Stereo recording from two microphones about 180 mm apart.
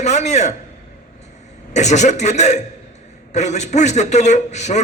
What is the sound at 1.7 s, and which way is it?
A man's voice, 40° left (ahead or behind).